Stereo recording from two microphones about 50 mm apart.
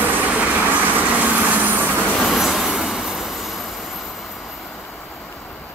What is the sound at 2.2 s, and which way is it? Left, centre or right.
Train, centre.